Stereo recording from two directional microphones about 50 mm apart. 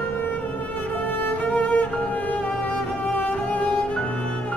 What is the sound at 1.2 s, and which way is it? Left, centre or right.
Music, left.